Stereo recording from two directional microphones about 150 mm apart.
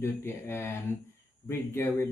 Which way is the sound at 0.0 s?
15° left (ahead or behind).